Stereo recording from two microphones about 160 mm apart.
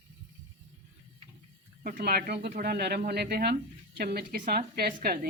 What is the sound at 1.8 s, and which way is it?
Speech, 80° right.